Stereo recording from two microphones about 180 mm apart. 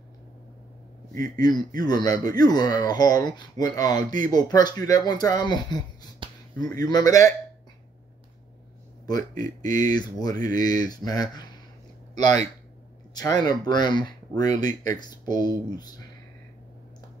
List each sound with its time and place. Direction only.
1.4 s speech: 25° left (ahead or behind)
6.2 s a sound: 30° right (ahead or behind)
6.6 s speech: 20° left (ahead or behind)
9.9 s speech: 20° left (ahead or behind)
13.1 s speech: 20° left (ahead or behind)